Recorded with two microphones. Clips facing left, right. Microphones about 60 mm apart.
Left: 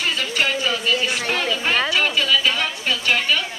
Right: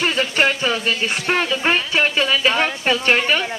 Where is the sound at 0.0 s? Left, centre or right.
Right.